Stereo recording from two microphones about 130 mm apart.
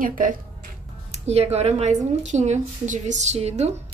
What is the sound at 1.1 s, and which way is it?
Speech, 55° right (ahead or behind).